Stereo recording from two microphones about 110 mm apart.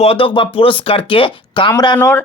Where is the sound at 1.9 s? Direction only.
20° left (ahead or behind).